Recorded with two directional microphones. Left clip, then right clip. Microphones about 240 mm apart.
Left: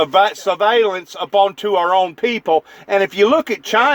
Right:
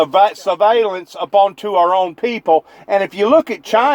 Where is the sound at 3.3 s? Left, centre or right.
Left.